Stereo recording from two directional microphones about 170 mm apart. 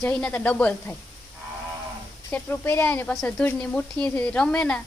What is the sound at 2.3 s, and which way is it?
Speech, 10° left (ahead or behind).